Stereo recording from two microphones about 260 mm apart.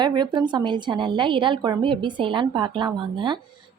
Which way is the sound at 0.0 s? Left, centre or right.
Centre.